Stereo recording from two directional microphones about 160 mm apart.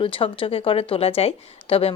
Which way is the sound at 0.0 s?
35° left (ahead or behind).